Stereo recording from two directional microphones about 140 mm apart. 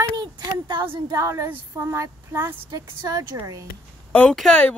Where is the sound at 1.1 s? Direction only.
25° right (ahead or behind).